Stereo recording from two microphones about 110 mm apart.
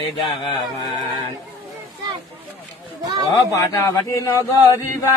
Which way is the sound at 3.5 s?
30° left (ahead or behind).